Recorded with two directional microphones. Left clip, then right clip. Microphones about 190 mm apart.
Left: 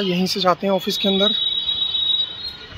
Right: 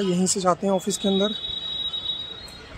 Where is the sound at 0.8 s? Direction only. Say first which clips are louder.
Left 6 dB; 10° right (ahead or behind).